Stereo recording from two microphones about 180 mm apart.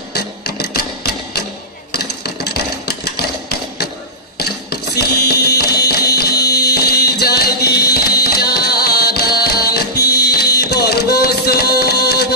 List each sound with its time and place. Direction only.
0.1 s sewing machine: 65° left (ahead or behind)
1.9 s a sound: 60° left (ahead or behind)
4.4 s music: 60° left (ahead or behind)